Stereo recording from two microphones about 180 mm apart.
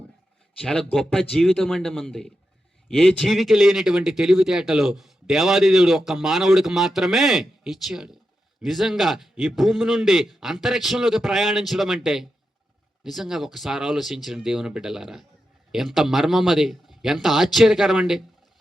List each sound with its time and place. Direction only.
0.6 s speech: 5° left (ahead or behind)